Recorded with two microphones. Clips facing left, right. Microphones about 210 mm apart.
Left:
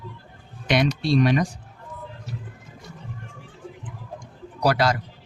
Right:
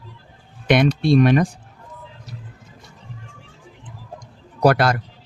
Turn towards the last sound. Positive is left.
turn(degrees=-55)  # may be behind; listen again after turning